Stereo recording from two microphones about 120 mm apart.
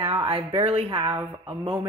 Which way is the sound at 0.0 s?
50° right (ahead or behind).